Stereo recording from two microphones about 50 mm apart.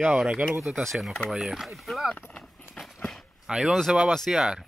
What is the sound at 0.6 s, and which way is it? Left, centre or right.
Speech, centre.